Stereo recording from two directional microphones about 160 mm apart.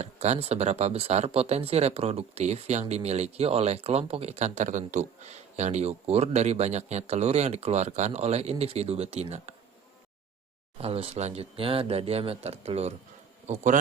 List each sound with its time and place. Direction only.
0.0 s speech: 45° right (ahead or behind)
10.8 s speech: 40° right (ahead or behind)